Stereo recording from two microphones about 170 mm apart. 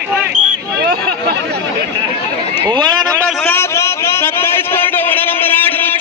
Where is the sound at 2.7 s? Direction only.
25° right (ahead or behind).